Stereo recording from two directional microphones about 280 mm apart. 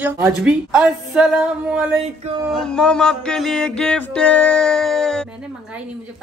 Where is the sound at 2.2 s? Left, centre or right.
Right.